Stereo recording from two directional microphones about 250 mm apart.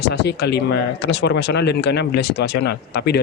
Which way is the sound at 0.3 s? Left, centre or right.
Left.